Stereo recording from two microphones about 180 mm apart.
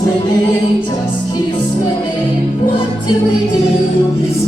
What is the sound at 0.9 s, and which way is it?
Speech, 20° left (ahead or behind).